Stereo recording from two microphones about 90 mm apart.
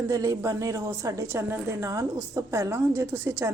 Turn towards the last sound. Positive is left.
turn(degrees=-30)  # may be behind; listen again after turning